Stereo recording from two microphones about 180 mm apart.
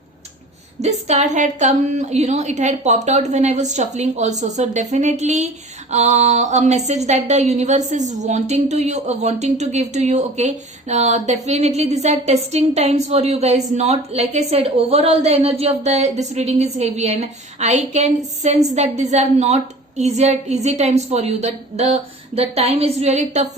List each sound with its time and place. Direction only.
0.8 s a woman's voice: 40° right (ahead or behind)